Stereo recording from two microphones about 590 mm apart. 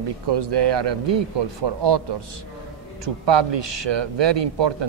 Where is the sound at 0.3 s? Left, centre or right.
Right.